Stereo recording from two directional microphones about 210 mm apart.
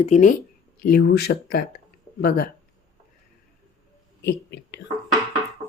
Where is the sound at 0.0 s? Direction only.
35° left (ahead or behind).